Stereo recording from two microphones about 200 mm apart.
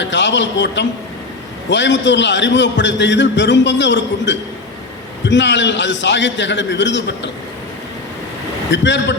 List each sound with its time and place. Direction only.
0.0 s a man's voice: 65° left (ahead or behind)
8.7 s a man's voice: 65° left (ahead or behind)